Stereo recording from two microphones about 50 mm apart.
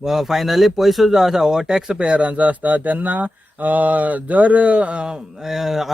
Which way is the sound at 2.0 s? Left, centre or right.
Right.